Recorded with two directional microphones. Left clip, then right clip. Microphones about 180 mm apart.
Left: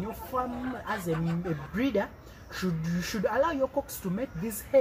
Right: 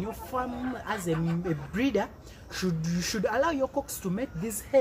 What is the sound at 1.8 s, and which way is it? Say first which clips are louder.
Speech: right 1 dB; 30° right (ahead or behind).